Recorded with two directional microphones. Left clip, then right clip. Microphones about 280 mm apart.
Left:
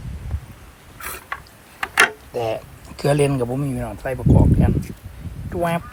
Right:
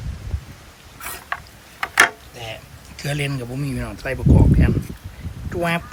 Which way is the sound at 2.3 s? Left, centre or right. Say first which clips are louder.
Left 10 dB; left.